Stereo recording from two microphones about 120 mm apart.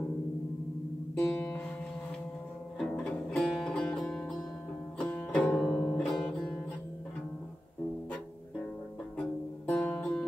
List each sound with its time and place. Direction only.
1.3 s music: 15° left (ahead or behind)
2.8 s music: 5° left (ahead or behind)
9.2 s music: 10° left (ahead or behind)